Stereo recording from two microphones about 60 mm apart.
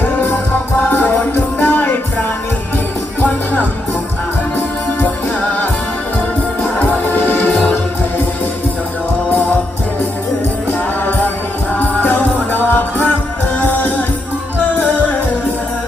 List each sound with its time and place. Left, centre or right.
1.5 s music: left
6.6 s music: left
11.8 s music: left